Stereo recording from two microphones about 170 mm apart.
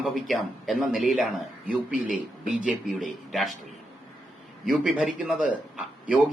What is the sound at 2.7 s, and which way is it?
Speech, centre (ahead or behind).